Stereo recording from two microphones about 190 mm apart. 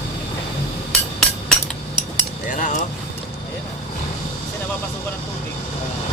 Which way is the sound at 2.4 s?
45° left (ahead or behind).